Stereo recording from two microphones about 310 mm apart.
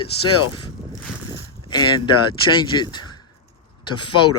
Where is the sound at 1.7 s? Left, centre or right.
Centre.